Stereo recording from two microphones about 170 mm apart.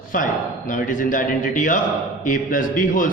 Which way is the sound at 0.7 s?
50° left (ahead or behind).